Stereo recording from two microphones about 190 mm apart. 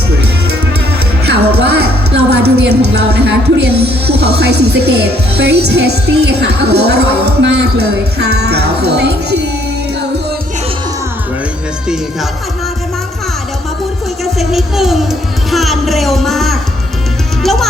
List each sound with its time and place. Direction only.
1.2 s music: 60° right (ahead or behind)
2.3 s a sound: 60° right (ahead or behind)
5.6 s speech: 60° right (ahead or behind)
14.3 s music: centre (ahead or behind)
15.4 s speech: centre (ahead or behind)